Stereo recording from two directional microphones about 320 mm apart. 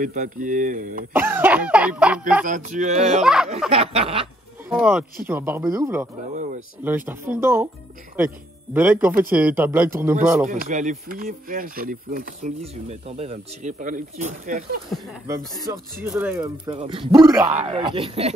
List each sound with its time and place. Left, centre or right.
0.0 s speech: right
1.1 s cough: centre
2.4 s speech: right
3.2 s cough: centre
3.7 s speech: centre
4.7 s cough: centre
5.2 s speech: centre
8.7 s cough: centre
9.3 s speech: centre
10.4 s speech: right
14.9 s speech: centre